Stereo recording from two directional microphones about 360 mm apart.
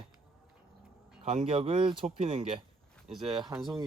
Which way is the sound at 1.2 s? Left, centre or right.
Centre.